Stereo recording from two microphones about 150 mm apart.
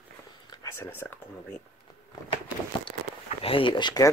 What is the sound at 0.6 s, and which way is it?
Speech, 15° left (ahead or behind).